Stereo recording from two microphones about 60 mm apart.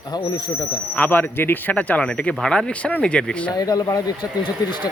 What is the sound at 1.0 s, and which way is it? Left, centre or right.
Speech, left.